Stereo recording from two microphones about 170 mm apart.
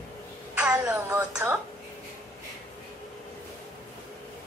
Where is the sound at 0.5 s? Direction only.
5° right (ahead or behind).